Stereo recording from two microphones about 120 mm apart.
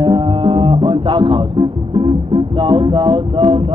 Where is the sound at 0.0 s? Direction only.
40° right (ahead or behind).